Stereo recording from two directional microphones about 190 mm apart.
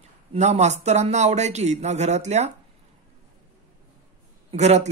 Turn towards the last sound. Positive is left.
turn(degrees=-35)  # may be behind; listen again after turning